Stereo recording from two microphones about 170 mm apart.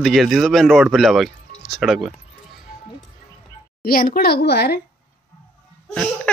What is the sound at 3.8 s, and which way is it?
A woman's voice, 60° left (ahead or behind).